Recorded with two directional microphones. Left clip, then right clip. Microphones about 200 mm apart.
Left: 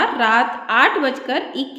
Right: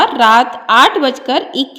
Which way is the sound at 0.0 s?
30° right (ahead or behind).